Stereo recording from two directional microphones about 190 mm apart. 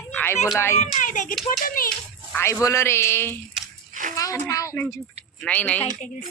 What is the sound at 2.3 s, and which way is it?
A man's voice, 15° left (ahead or behind).